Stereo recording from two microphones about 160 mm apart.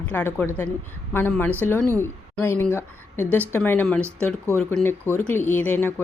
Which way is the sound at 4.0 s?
15° right (ahead or behind).